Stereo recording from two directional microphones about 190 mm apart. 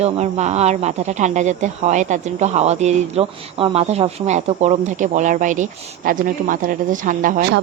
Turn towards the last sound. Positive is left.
turn(degrees=-45)  # may be behind; listen again after turning